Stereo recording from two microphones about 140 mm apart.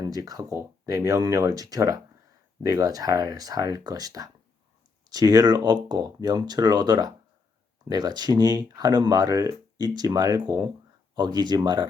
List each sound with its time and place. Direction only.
0.0 s speech: 25° right (ahead or behind)